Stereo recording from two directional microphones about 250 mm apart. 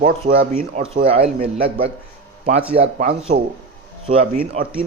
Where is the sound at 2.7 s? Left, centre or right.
Right.